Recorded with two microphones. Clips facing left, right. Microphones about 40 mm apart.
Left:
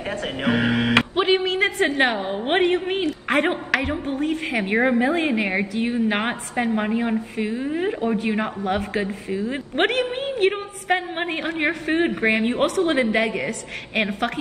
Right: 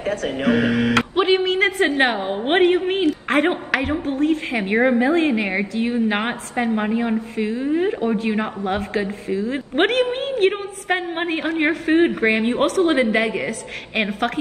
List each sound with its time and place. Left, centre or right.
0.0 s speech: left
1.1 s a sound: centre
2.1 s a woman's voice: centre
4.0 s a woman's voice: centre